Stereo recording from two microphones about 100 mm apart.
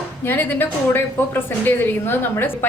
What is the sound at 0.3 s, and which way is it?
A woman's voice, 20° left (ahead or behind).